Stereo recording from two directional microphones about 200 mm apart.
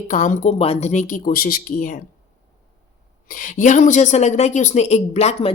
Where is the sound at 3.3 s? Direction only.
40° left (ahead or behind).